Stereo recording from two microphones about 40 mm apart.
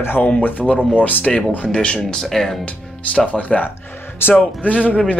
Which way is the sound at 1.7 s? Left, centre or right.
Left.